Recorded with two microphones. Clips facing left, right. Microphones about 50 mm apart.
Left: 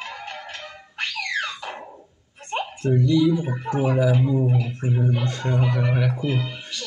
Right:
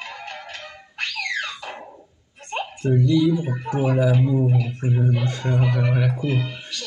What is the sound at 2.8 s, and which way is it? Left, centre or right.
Speech, centre.